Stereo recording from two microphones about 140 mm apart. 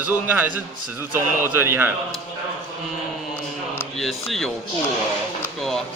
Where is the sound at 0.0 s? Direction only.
15° right (ahead or behind).